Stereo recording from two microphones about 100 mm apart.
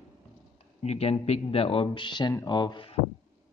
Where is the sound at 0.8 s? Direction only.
90° left; by 2.9 s 50° left (ahead or behind).